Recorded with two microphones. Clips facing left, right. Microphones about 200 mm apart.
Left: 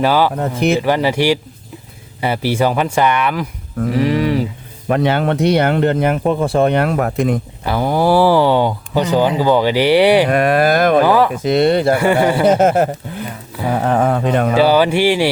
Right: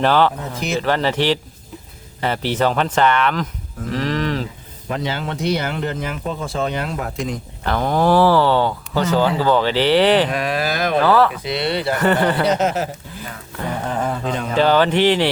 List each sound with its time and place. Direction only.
0.0 s speech: 5° left (ahead or behind)
0.3 s speech: 60° left (ahead or behind)
0.8 s speech: 10° left (ahead or behind)
4.9 s speech: 60° left (ahead or behind)
7.6 s speech: 10° left (ahead or behind)
10.2 s speech: 55° left (ahead or behind)
11.0 s speech: 15° left (ahead or behind)
11.4 s speech: 45° left (ahead or behind)
11.9 s speech: 10° left (ahead or behind)
12.5 s speech: 50° left (ahead or behind)
13.7 s speech: 70° left (ahead or behind)
14.5 s speech: 10° left (ahead or behind)